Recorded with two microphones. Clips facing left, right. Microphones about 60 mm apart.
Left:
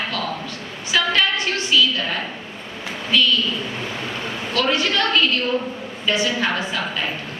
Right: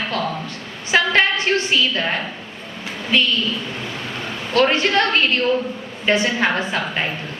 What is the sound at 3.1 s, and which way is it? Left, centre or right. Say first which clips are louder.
Speech: even; right.